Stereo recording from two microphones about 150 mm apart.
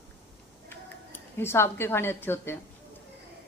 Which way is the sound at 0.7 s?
15° left (ahead or behind).